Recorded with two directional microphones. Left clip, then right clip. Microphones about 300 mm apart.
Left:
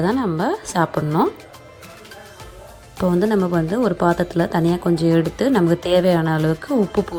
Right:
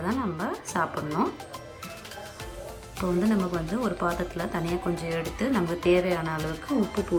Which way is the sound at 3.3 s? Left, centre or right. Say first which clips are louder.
Left 9 dB; left.